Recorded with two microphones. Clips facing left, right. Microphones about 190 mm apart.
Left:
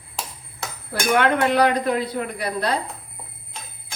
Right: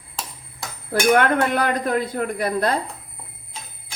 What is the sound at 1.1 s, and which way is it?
Speech, 50° right (ahead or behind).